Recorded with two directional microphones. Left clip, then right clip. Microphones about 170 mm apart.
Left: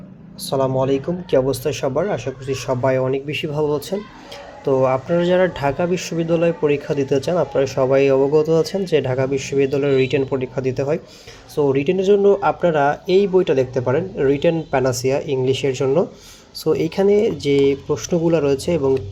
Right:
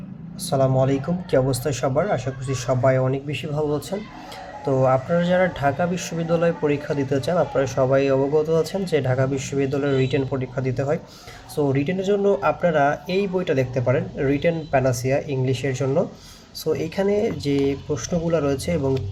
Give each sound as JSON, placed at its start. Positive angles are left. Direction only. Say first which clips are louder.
{"t": 0.4, "sound": "speech", "louder": "left 1 dB", "side_deg": 15}